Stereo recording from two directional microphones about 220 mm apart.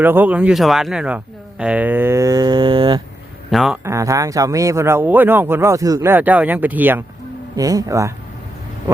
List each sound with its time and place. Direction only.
0.0 s speech: 10° right (ahead or behind)
3.5 s speech: centre (ahead or behind)
3.8 s speech: 15° right (ahead or behind)